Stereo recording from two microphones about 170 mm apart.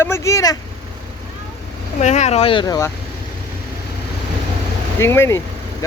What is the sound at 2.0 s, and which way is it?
Speech, 40° left (ahead or behind).